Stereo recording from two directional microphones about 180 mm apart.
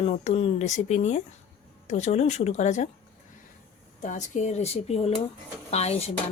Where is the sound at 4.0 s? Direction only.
45° left (ahead or behind).